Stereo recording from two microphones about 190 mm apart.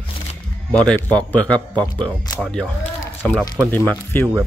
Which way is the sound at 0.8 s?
5° left (ahead or behind).